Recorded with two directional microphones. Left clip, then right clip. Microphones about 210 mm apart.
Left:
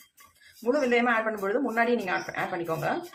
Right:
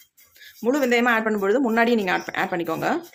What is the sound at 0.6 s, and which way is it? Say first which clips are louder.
Speech: right 4 dB; 50° right (ahead or behind).